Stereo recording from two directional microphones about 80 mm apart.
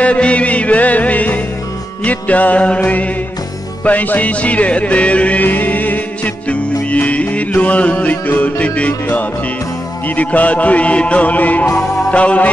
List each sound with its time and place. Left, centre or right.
0.0 s music: centre